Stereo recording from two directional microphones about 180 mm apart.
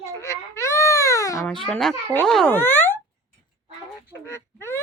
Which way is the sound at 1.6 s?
5° left (ahead or behind).